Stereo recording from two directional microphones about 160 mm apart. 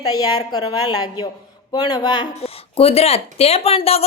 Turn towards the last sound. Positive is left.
turn(degrees=40)  # may be behind; listen again after turning